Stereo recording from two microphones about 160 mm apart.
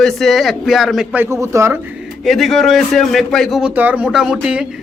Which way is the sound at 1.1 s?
15° right (ahead or behind).